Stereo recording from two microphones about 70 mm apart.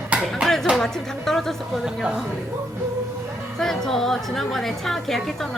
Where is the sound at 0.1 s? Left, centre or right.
Right.